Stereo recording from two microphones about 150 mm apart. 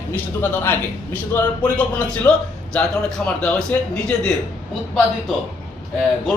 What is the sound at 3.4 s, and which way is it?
Speech, 5° left (ahead or behind).